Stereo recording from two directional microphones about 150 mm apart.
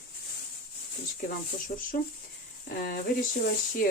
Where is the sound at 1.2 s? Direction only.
65° left (ahead or behind).